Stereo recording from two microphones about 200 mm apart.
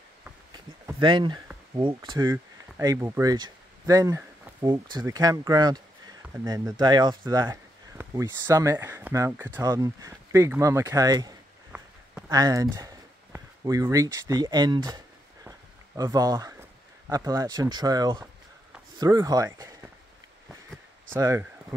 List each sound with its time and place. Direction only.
0.5 s a sound: 20° right (ahead or behind)
1.8 s speech: 25° right (ahead or behind)
16.0 s speech: 20° right (ahead or behind)
21.1 s speech: 15° right (ahead or behind)